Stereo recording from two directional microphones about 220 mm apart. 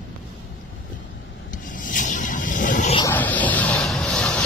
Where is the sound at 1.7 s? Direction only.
35° left (ahead or behind).